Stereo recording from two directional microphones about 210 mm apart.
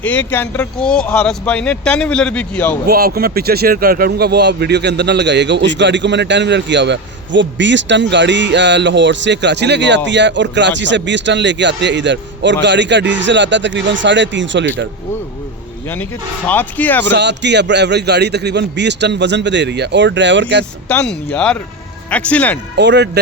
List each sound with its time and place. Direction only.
0.0 s speech: 10° left (ahead or behind)
2.8 s speech: 45° right (ahead or behind)
16.5 s speech: 10° left (ahead or behind)
17.1 s speech: 55° right (ahead or behind)
20.8 s speech: 5° left (ahead or behind)
22.8 s speech: 55° right (ahead or behind)